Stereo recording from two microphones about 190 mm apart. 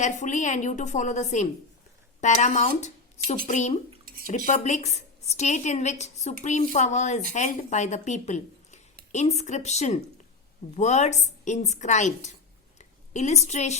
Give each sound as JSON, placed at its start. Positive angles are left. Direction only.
{"t": 0.0, "sound": "a woman's voice", "side_deg": 40}